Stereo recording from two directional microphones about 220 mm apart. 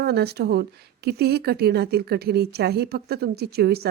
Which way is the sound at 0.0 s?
45° right (ahead or behind).